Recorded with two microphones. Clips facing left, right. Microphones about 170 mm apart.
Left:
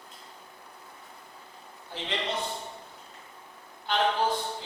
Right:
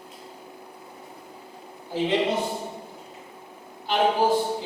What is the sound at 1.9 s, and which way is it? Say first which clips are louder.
Speech: right 10 dB; 10° right (ahead or behind).